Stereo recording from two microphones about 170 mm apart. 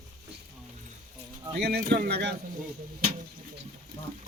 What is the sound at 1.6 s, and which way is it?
Speech, 70° right (ahead or behind).